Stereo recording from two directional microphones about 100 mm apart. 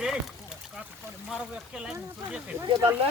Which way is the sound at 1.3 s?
5° right (ahead or behind).